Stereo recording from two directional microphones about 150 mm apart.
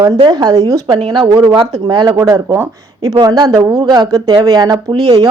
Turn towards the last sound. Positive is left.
turn(degrees=-25)  # may be behind; listen again after turning